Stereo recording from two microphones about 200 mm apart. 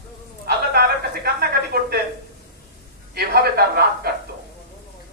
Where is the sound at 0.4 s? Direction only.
50° right (ahead or behind).